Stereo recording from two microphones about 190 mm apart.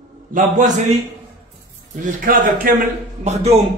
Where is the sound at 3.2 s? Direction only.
35° right (ahead or behind).